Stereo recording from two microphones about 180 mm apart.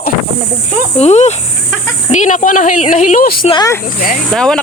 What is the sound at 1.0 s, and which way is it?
A woman's voice, 40° left (ahead or behind).